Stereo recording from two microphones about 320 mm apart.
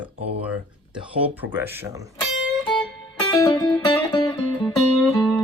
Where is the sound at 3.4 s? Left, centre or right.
Centre.